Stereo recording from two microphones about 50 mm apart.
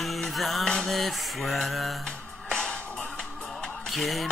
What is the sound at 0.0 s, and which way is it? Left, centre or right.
Music, centre.